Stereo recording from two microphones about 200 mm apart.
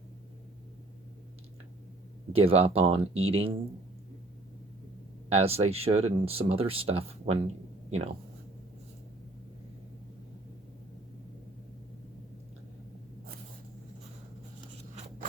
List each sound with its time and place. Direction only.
2.3 s speech: 30° right (ahead or behind)
5.3 s speech: 30° right (ahead or behind)